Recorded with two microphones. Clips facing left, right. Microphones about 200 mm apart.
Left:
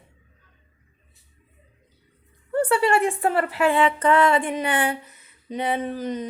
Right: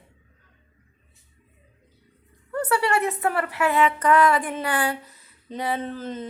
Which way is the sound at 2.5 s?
30° left (ahead or behind).